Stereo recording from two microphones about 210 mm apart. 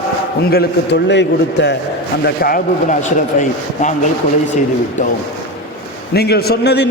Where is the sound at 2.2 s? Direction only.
45° left (ahead or behind).